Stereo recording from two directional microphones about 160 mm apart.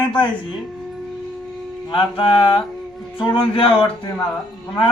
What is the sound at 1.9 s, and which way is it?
A man's voice, 30° left (ahead or behind).